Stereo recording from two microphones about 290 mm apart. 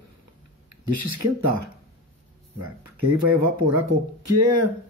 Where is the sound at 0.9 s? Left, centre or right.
Right.